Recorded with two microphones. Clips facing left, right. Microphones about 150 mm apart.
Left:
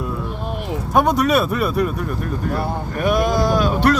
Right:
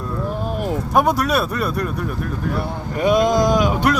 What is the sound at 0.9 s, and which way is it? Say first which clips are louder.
Speech: left 2 dB; centre (ahead or behind).